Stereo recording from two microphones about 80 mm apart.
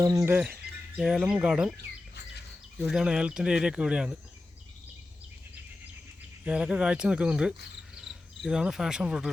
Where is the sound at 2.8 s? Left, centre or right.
Centre.